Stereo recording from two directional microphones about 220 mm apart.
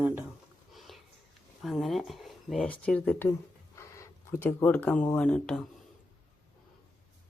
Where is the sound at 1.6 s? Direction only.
Centre (ahead or behind).